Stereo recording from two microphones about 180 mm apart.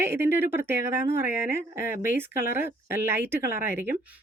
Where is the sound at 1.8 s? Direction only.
50° left (ahead or behind).